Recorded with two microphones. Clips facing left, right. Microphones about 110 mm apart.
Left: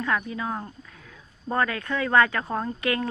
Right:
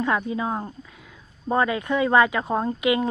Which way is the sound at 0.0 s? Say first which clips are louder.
Right 4 dB; 20° right (ahead or behind).